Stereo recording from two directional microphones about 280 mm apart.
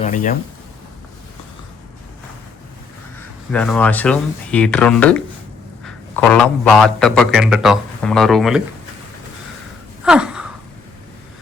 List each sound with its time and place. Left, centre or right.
0.0 s speech: left
3.5 s a man's voice: centre
10.0 s a sound: centre